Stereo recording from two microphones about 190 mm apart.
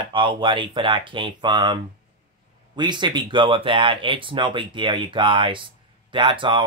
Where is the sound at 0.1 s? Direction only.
25° right (ahead or behind).